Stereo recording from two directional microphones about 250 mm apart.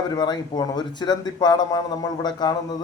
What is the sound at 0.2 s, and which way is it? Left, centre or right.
Speech, centre.